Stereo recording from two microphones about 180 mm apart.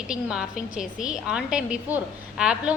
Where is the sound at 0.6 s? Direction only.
45° left (ahead or behind).